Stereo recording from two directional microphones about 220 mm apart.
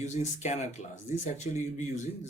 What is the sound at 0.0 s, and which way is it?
Speech, 30° left (ahead or behind).